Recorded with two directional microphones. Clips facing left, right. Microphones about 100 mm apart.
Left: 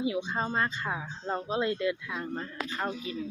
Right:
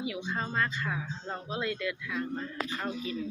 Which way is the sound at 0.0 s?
25° left (ahead or behind).